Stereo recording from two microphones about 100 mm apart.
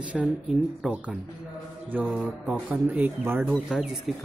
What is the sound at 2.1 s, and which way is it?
Speech, 15° right (ahead or behind).